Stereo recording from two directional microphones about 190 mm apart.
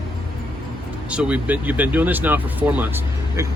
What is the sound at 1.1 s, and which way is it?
Speech, 10° right (ahead or behind).